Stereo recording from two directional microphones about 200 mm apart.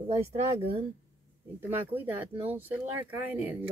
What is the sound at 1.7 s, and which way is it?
Speech, 10° right (ahead or behind).